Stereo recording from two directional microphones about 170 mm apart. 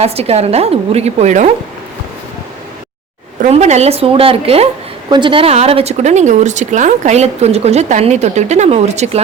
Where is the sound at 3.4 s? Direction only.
40° right (ahead or behind).